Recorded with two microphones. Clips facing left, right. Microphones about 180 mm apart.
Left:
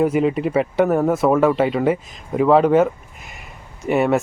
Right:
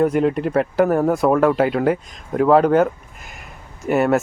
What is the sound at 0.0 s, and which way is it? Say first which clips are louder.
Speech: even; 5° left (ahead or behind).